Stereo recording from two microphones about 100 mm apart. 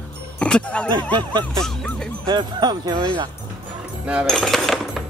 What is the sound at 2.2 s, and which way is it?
Speech, 45° right (ahead or behind).